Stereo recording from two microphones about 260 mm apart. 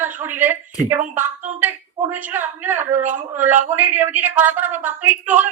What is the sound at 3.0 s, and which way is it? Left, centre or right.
Speech, right.